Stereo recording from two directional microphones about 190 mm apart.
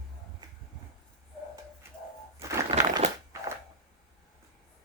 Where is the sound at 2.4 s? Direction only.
20° right (ahead or behind).